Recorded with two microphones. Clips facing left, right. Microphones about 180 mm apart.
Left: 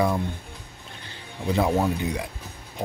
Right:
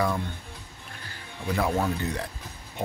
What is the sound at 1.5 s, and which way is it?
Speech, 20° left (ahead or behind).